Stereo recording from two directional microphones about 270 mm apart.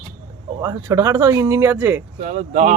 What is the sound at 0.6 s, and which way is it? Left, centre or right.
Speech, centre.